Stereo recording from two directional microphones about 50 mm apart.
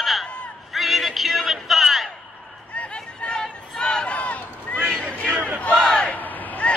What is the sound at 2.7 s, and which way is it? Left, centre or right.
Chatter, left.